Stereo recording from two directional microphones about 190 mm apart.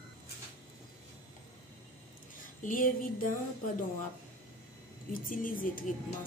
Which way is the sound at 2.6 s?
45° left (ahead or behind).